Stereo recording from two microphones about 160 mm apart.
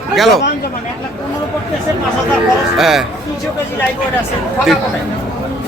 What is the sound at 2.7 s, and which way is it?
Speech, centre (ahead or behind).